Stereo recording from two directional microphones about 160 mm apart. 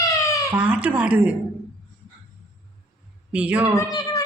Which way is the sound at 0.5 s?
10° right (ahead or behind).